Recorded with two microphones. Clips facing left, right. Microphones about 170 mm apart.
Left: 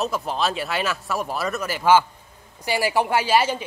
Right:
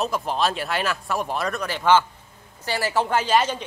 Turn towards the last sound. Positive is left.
turn(degrees=10)  # may be behind; listen again after turning